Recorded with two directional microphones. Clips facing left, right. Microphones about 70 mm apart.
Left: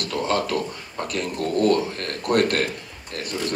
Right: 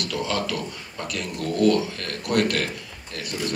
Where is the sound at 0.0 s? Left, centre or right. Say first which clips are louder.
Left 3 dB; left.